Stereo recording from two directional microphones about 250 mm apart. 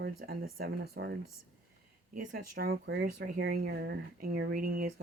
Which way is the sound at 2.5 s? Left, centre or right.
Right.